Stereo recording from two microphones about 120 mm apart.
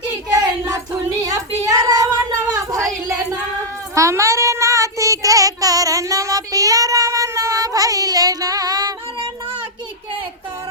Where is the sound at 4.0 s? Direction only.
25° right (ahead or behind).